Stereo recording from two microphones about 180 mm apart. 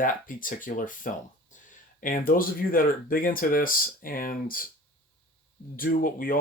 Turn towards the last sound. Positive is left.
turn(degrees=50)  # may be behind; listen again after turning